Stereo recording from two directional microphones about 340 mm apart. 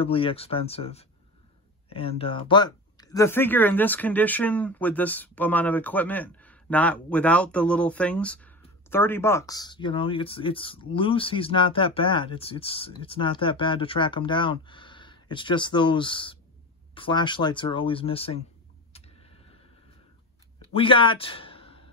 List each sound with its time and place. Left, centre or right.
0.0 s speech: centre
18.9 s tick-tock: centre
20.7 s a man's voice: centre